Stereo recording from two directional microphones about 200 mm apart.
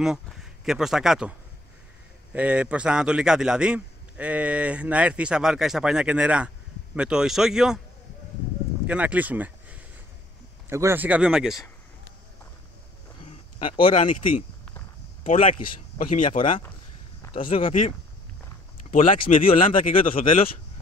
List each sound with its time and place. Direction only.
0.0 s speech: 5° right (ahead or behind)
2.3 s a man's voice: 5° right (ahead or behind)
8.8 s a man's voice: 5° right (ahead or behind)
13.2 s a sound: 25° left (ahead or behind)
15.2 s speech: 35° left (ahead or behind)
17.2 s speech: 25° left (ahead or behind)
18.9 s speech: 40° left (ahead or behind)